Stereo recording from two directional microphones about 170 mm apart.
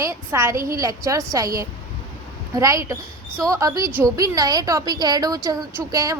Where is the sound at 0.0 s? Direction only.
15° right (ahead or behind).